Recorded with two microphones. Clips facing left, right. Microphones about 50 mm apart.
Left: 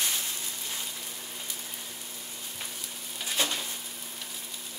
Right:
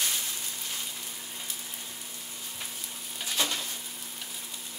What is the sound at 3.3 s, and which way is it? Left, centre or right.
Frying, centre.